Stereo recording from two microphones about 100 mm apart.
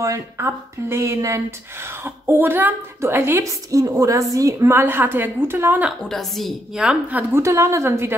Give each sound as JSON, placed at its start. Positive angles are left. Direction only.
{"t": 0.0, "sound": "speech", "side_deg": -30}
{"t": 6.0, "sound": "a woman's voice", "side_deg": 0}
{"t": 7.1, "sound": "a woman's voice", "side_deg": -15}
{"t": 7.4, "sound": "speech", "side_deg": -30}